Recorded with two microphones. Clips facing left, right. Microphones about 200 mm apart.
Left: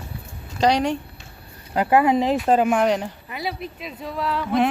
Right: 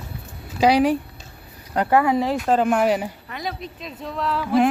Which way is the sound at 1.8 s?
20° left (ahead or behind).